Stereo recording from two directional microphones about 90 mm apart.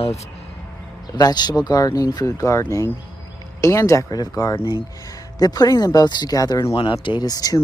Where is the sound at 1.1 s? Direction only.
50° left (ahead or behind); by 2.6 s 35° left (ahead or behind).